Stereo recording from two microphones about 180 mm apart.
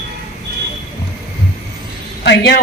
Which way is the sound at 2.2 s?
70° left (ahead or behind).